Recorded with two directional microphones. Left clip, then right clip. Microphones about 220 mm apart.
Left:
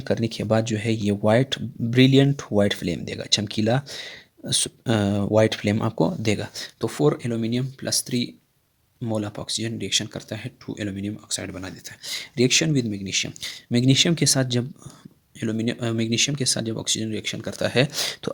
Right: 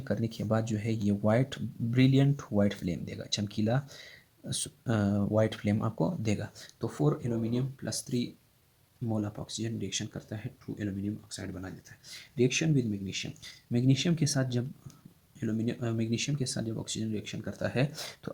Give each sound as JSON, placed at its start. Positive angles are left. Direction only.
{"t": 0.0, "sound": "speech", "side_deg": 30}